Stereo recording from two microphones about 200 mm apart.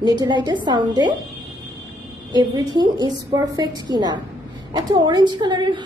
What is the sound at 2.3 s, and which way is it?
A woman's voice, 20° right (ahead or behind).